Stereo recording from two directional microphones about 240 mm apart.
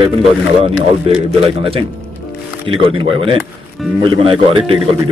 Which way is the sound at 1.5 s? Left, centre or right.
Right.